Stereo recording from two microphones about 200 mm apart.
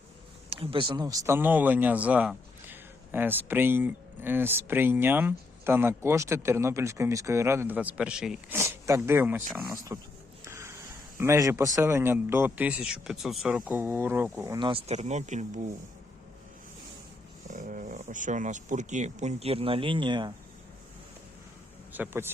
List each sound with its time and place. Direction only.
0.5 s speech: 25° right (ahead or behind)
10.4 s a sound: 15° right (ahead or behind)
11.2 s speech: 15° right (ahead or behind)
14.7 s speech: 30° right (ahead or behind)
17.5 s speech: 40° right (ahead or behind); by 20.3 s 25° right (ahead or behind)
21.9 s speech: 10° right (ahead or behind)